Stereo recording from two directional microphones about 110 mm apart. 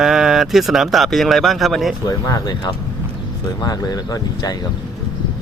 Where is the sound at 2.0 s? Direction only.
35° left (ahead or behind).